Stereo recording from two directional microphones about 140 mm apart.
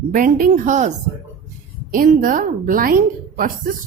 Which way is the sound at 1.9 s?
80° right.